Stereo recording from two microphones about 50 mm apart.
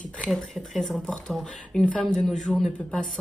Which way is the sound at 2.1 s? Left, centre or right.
Centre.